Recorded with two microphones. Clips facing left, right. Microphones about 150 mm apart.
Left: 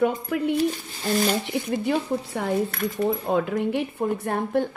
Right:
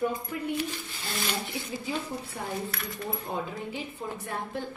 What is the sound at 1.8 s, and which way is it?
Speech, 70° left (ahead or behind).